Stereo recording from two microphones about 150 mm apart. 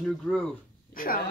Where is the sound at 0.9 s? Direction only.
70° left (ahead or behind).